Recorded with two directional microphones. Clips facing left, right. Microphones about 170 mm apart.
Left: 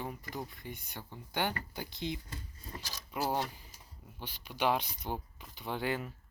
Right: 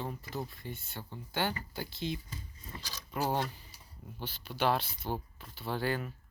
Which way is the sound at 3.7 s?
45° left (ahead or behind).